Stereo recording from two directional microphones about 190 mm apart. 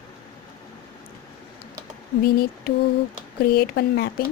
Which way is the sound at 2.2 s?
55° left (ahead or behind).